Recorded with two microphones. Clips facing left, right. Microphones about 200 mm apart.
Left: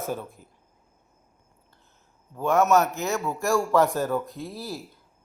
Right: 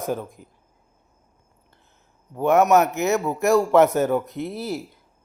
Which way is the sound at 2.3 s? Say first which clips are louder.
Right 4 dB; 20° right (ahead or behind).